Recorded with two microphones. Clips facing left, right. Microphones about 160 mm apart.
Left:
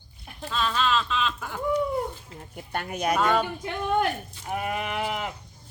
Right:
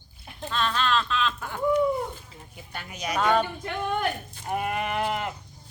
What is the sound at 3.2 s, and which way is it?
Sheep, centre (ahead or behind).